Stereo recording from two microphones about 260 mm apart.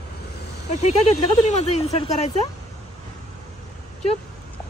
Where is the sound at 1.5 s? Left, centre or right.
Left.